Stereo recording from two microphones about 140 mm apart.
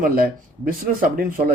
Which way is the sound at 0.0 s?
85° right.